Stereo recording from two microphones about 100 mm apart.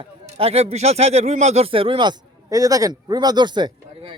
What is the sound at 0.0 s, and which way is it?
Speech, 80° right.